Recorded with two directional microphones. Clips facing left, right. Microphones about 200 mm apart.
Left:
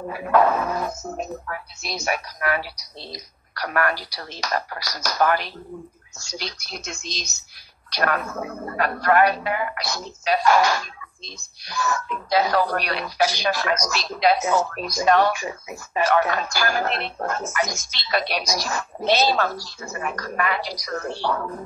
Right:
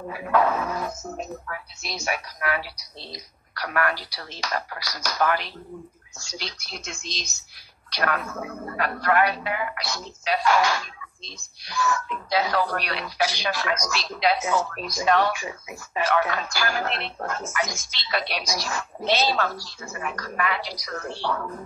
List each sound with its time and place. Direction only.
0.1 s a woman's voice: 45° left (ahead or behind)